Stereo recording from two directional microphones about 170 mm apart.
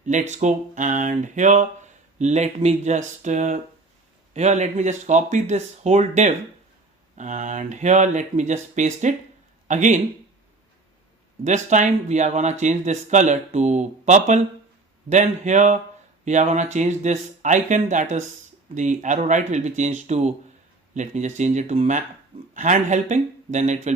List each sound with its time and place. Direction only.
0.0 s speech: 45° right (ahead or behind)
11.4 s speech: 45° right (ahead or behind)